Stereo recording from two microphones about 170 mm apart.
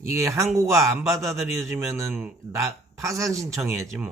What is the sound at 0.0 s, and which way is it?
Speech, 15° right (ahead or behind).